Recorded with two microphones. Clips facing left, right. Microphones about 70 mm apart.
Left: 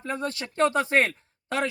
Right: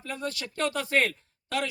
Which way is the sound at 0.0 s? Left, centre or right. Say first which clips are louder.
Left 4 dB; left.